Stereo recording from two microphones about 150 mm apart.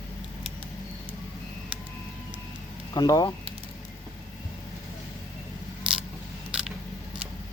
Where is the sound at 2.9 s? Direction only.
25° left (ahead or behind).